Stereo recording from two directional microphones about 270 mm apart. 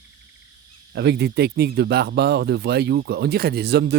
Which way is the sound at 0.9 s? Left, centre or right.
Right.